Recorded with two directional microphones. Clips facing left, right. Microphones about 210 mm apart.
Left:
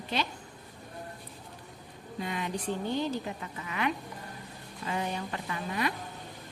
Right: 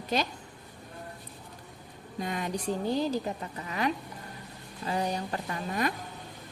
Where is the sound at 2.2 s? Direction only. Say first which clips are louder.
Right 2 dB; 45° right (ahead or behind).